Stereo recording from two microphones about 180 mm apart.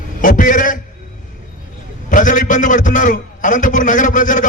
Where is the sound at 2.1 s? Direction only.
45° left (ahead or behind).